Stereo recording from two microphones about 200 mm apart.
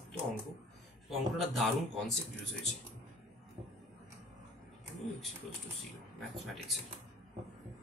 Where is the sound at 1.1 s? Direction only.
Centre (ahead or behind).